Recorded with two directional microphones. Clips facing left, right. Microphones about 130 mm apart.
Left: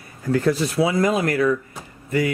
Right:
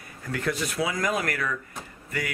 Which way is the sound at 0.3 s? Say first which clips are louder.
Left 9 dB; 30° left (ahead or behind).